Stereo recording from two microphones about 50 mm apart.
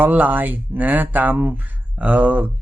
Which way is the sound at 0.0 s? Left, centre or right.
Right.